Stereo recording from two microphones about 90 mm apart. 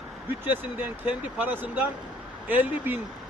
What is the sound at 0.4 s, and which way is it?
A man's voice, 20° right (ahead or behind).